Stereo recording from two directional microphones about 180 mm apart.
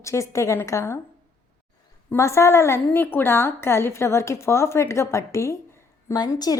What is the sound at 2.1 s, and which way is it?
A woman's voice, 15° left (ahead or behind).